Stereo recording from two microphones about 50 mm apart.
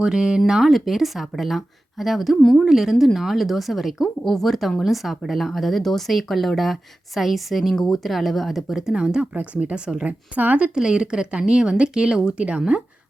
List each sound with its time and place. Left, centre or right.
0.0 s speech: centre
8.9 s speech: centre
9.3 s speech: right
10.3 s speech: right
10.8 s speech: centre